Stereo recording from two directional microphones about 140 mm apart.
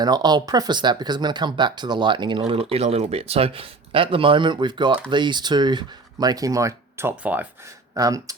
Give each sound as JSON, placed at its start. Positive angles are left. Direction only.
{"t": 0.0, "sound": "speech", "side_deg": -30}
{"t": 7.9, "sound": "speech", "side_deg": -25}